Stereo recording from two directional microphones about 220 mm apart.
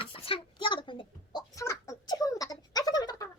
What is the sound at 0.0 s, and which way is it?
Chicken, 25° left (ahead or behind).